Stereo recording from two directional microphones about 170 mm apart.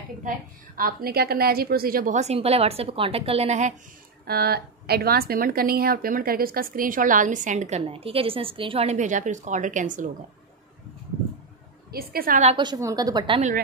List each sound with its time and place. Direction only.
0.7 s a woman's voice: 60° right (ahead or behind)
2.1 s a woman's voice: 40° right (ahead or behind)
4.3 s speech: 65° right (ahead or behind); by 10.1 s 50° right (ahead or behind)
11.9 s a woman's voice: 65° right (ahead or behind)
12.5 s a woman's voice: 25° right (ahead or behind)